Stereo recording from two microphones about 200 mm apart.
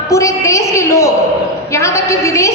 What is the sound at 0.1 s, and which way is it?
A woman's voice, 15° left (ahead or behind).